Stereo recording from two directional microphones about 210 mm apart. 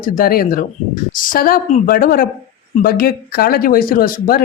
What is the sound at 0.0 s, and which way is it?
A woman's voice, 45° left (ahead or behind).